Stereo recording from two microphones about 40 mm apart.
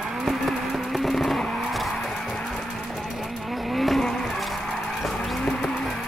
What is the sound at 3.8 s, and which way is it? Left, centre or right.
Vehicle, centre.